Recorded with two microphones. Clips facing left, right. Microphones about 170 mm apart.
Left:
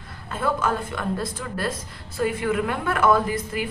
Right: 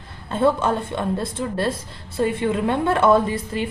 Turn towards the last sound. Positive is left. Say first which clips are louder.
# right 3 dB
turn(degrees=-30)  # may be behind; listen again after turning